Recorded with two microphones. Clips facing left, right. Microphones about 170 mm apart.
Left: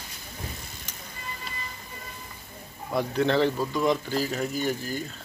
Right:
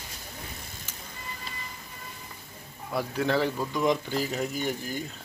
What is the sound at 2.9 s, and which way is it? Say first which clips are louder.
Speech: left 3 dB; 5° right (ahead or behind).